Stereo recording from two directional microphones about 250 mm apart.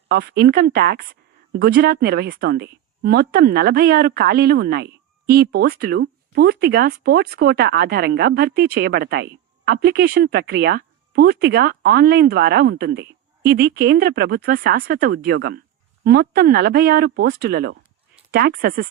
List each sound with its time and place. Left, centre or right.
0.1 s speech: right